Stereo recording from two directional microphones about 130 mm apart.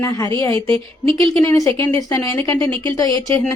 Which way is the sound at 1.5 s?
25° left (ahead or behind).